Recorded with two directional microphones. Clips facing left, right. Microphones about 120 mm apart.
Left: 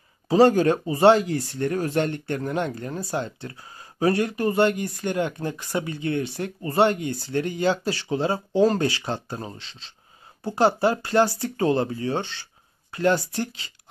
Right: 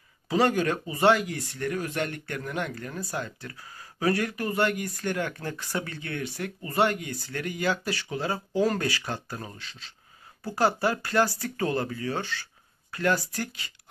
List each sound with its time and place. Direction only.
0.3 s speech: 30° left (ahead or behind)